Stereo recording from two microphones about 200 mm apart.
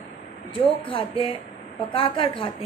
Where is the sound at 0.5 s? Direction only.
25° left (ahead or behind).